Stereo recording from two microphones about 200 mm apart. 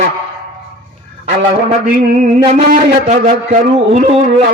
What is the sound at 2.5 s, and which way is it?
A man's voice, 30° right (ahead or behind).